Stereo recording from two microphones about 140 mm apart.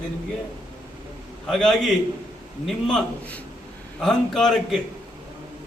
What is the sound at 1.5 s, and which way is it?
A man's voice, centre (ahead or behind).